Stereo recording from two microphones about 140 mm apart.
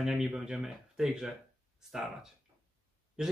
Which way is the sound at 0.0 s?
5° right (ahead or behind).